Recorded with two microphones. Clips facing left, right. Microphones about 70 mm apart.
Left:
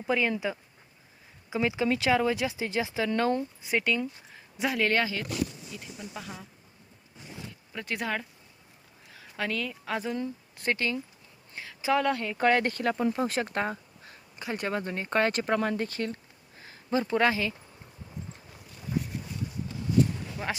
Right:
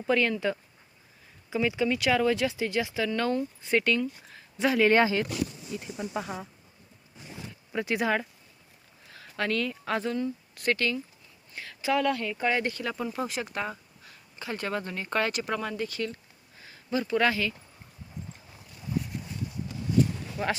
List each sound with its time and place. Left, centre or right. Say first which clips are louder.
0.1 s speech: right 2 dB; centre
1.9 s speech: even; left
3.6 s speech: right 2 dB; centre
4.9 s speech: right 5 dB; right
7.9 s speech: right 4 dB; centre
9.1 s speech: right 3 dB; centre
10.2 s speech: right 3 dB; left
12.4 s speech: left 3 dB; left
14.3 s speech: left 1 dB; left
20.4 s speech: right 4 dB; centre